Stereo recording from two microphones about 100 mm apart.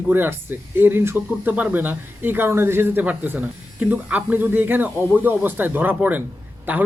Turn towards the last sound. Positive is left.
turn(degrees=-20)  # may be behind; listen again after turning